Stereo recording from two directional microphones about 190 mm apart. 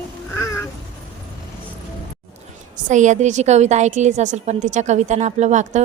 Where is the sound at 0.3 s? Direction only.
15° left (ahead or behind).